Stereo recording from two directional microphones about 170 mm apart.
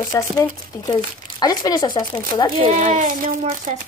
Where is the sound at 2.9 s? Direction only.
50° right (ahead or behind).